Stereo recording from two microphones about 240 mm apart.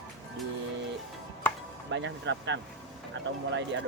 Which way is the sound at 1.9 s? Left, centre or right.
Right.